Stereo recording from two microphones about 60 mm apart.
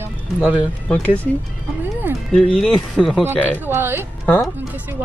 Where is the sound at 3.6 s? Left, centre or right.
Right.